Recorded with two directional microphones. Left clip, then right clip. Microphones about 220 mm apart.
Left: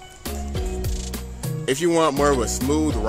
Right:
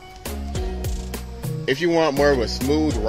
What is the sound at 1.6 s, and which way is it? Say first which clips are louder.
Speech: even; 15° left (ahead or behind).